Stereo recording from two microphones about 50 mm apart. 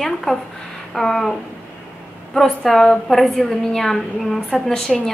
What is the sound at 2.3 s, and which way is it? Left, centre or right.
A woman's voice, centre.